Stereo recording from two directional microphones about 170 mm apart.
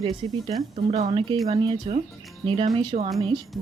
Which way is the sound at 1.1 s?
30° right (ahead or behind).